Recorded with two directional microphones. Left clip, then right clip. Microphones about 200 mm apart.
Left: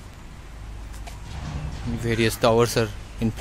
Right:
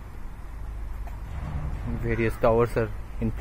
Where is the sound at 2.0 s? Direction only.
25° left (ahead or behind).